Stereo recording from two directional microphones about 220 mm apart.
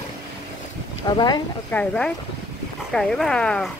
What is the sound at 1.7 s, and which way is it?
Speech, 5° left (ahead or behind).